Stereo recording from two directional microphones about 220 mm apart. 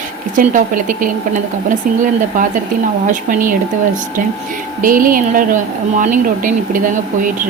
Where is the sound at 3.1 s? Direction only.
40° right (ahead or behind).